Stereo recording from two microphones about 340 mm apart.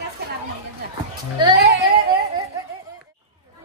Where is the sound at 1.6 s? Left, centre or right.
Right.